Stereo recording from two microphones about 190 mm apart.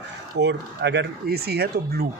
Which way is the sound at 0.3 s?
65° right (ahead or behind).